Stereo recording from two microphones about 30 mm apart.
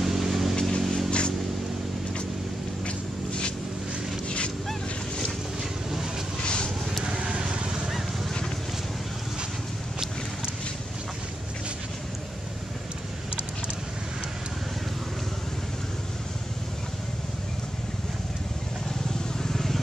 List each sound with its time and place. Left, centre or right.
0.0 s vehicle: centre
0.6 s vehicle: left
0.8 s vehicle: centre
5.6 s vehicle: centre
6.4 s vehicle: left
7.2 s vehicle: right
19.4 s vehicle: centre